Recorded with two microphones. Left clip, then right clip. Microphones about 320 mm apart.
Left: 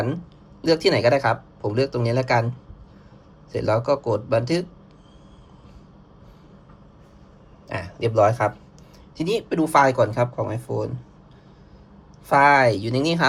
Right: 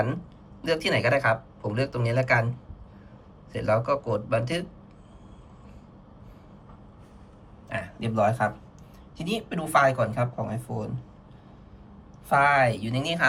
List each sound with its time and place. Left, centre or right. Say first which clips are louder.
0.6 s speech: left 6 dB; centre
3.5 s speech: left 3 dB; centre
7.7 s speech: left 6 dB; centre
12.3 s speech: left 5 dB; centre